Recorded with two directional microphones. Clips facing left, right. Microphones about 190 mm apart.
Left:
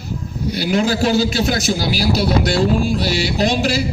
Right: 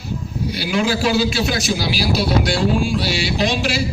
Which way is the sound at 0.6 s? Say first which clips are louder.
Left 3 dB; 45° left (ahead or behind).